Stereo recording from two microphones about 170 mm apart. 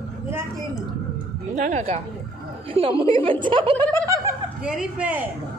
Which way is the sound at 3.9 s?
20° right (ahead or behind).